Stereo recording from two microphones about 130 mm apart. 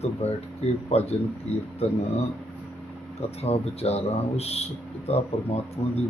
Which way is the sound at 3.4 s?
50° left (ahead or behind).